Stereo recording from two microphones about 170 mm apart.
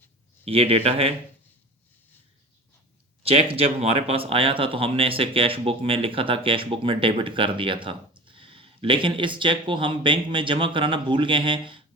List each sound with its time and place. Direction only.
0.4 s speech: 35° right (ahead or behind)
3.2 s speech: 35° right (ahead or behind)